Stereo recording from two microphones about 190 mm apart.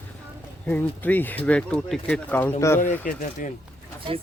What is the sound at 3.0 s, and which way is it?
Speech, 45° left (ahead or behind).